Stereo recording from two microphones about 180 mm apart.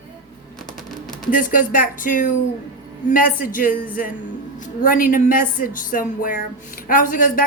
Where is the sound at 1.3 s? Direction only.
50° left (ahead or behind).